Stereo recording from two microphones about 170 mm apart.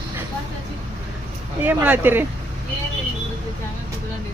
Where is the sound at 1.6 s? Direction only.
10° right (ahead or behind).